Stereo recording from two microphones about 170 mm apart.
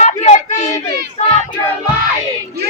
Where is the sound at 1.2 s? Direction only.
45° left (ahead or behind).